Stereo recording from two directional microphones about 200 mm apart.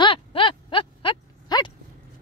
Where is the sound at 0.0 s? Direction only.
25° left (ahead or behind).